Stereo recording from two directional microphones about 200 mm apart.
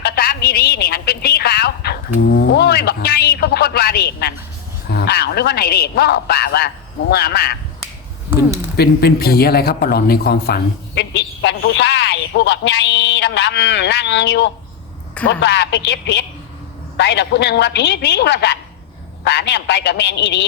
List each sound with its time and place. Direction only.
0.0 s a woman's voice: 50° left (ahead or behind)
8.7 s a man's voice: 50° left (ahead or behind)